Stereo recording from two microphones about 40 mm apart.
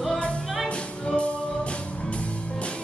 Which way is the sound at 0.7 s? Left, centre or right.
Left.